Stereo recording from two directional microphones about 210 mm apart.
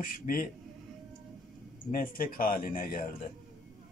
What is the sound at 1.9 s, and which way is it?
Speech, 40° left (ahead or behind).